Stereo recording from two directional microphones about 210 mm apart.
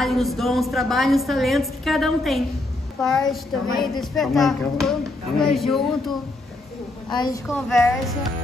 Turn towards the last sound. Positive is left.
turn(degrees=5)  # may be behind; listen again after turning